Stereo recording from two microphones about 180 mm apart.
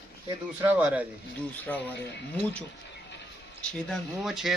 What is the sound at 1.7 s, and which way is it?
Speech, 5° left (ahead or behind).